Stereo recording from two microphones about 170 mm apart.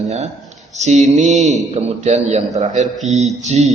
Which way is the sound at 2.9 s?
Centre (ahead or behind).